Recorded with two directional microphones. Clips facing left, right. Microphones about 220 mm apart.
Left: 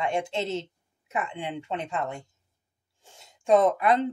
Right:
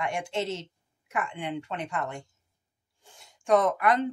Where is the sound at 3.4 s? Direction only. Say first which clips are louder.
Left 2 dB; 25° left (ahead or behind).